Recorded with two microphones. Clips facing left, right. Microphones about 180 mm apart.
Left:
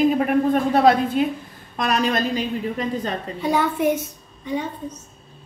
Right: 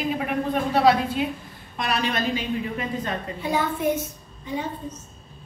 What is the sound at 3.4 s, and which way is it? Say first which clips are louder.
Speech: left 5 dB; 60° left (ahead or behind).